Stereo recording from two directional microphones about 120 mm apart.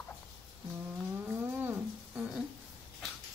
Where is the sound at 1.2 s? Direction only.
15° right (ahead or behind).